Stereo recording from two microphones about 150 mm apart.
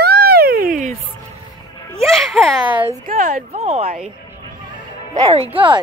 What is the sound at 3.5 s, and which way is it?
Speech, 45° right (ahead or behind).